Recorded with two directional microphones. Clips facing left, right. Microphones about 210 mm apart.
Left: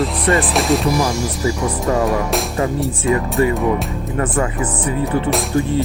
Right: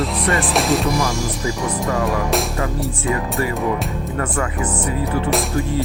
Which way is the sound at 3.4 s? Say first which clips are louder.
Left 9 dB; 25° left (ahead or behind).